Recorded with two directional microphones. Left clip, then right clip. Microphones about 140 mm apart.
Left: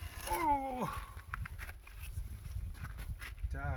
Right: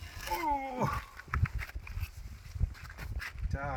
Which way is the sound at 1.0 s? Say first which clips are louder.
Right 7 dB; 15° right (ahead or behind).